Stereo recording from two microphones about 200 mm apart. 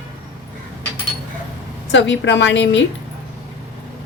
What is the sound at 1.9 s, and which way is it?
Speech, 60° left (ahead or behind).